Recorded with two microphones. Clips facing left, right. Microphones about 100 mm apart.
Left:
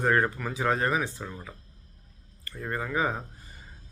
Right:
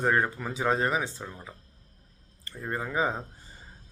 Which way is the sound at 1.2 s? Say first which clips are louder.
Left 2 dB; 10° right (ahead or behind).